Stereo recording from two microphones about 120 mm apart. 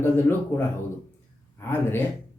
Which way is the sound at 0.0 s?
20° left (ahead or behind).